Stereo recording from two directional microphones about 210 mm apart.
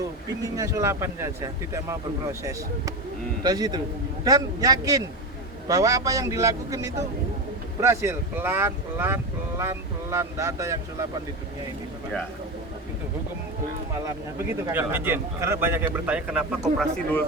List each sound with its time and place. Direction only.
0.5 s a man's voice: 15° right (ahead or behind)
14.7 s speech: 10° right (ahead or behind)
16.7 s speech: 5° left (ahead or behind)